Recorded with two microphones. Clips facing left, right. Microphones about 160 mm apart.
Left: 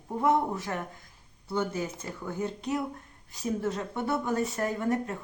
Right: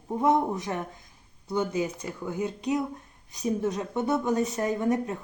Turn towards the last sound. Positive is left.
turn(degrees=-20)  # may be behind; listen again after turning